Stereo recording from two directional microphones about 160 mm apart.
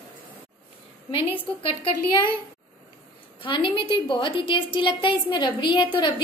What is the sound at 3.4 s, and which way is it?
A woman's voice, 30° left (ahead or behind).